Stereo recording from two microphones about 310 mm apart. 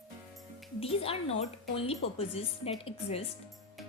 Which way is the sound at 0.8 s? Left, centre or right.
Centre.